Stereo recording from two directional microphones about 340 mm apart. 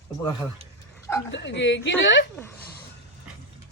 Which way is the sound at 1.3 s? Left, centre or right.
Left.